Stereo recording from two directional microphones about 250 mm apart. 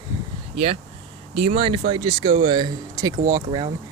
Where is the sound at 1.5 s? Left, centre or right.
Centre.